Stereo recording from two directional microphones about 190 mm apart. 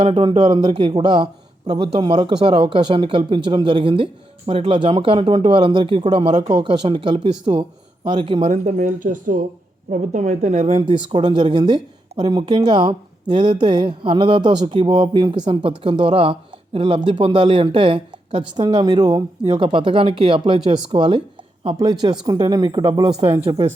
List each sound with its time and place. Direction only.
0.0 s a man's voice: 30° right (ahead or behind)
23.3 s speech: 10° right (ahead or behind)